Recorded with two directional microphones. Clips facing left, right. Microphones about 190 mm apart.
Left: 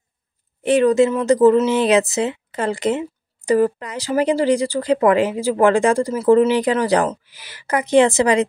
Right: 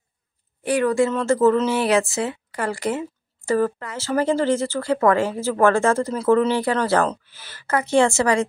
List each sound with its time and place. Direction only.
0.7 s speech: 20° left (ahead or behind)